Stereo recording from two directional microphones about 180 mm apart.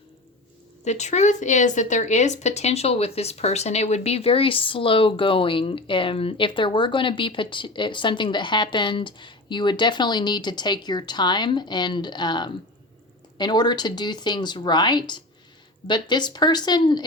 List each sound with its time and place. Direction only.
0.9 s a woman's voice: 40° left (ahead or behind); by 17.1 s 25° left (ahead or behind)